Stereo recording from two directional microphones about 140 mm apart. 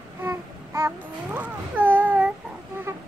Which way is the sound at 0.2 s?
20° right (ahead or behind).